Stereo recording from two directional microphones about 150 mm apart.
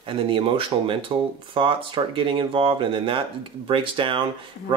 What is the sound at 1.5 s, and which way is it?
Speech, 35° right (ahead or behind).